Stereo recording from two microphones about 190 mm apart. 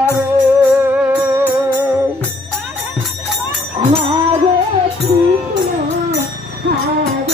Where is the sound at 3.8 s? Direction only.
25° right (ahead or behind).